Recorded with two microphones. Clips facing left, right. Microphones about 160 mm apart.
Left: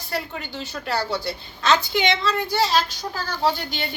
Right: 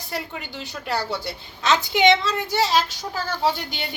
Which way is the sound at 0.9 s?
20° right (ahead or behind).